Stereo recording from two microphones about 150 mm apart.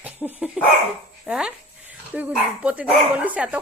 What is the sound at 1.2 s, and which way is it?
Speech, 5° right (ahead or behind).